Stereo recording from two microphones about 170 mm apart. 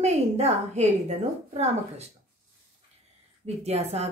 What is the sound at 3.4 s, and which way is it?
Speech, 40° right (ahead or behind).